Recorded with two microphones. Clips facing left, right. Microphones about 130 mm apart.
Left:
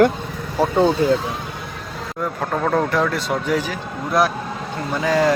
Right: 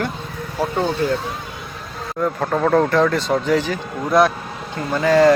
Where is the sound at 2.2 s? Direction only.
Centre (ahead or behind).